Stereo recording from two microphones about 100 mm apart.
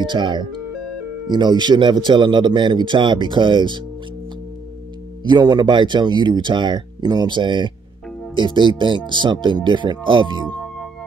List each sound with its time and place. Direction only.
0.0 s speech: 50° right (ahead or behind)
5.2 s speech: 45° right (ahead or behind)